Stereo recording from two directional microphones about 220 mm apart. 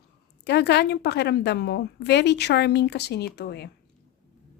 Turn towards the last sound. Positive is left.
turn(degrees=50)  # may be behind; listen again after turning